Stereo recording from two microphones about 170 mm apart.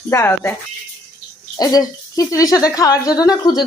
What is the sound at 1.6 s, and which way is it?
Speech, 20° left (ahead or behind).